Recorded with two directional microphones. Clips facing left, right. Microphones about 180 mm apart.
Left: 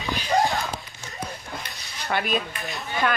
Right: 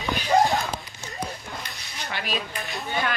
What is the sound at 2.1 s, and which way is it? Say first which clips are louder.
Speech: left 8 dB; 50° left (ahead or behind).